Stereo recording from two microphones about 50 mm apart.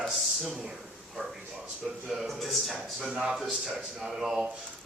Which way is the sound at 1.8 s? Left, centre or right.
Centre.